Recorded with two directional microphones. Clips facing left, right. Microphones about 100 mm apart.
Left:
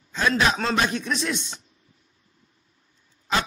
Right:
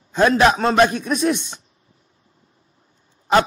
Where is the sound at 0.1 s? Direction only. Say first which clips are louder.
Right 7 dB; 45° right (ahead or behind).